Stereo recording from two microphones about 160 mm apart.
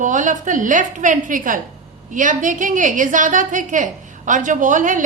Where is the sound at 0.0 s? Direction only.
50° right (ahead or behind).